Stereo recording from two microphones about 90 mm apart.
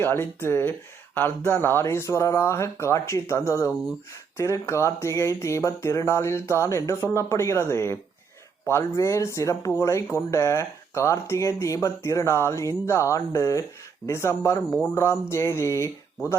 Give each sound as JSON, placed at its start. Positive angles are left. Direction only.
{"t": 0.0, "sound": "speech", "side_deg": 25}